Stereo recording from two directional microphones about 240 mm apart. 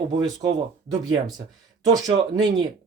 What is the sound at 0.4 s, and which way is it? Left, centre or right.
Speech, centre.